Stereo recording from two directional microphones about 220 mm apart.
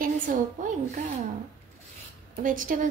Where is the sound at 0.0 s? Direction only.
35° right (ahead or behind).